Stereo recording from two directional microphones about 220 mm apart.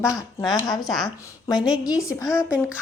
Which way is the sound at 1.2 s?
15° left (ahead or behind).